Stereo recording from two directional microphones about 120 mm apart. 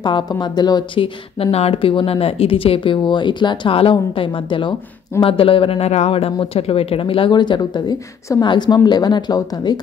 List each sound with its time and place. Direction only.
0.0 s a woman's voice: 40° left (ahead or behind)